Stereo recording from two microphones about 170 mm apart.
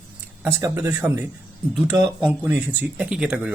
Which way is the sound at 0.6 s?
15° right (ahead or behind).